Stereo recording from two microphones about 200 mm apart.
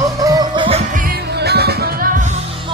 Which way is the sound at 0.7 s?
40° right (ahead or behind).